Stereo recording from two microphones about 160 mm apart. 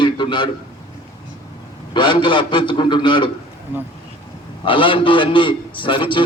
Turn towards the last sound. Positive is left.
turn(degrees=30)  # may be behind; listen again after turning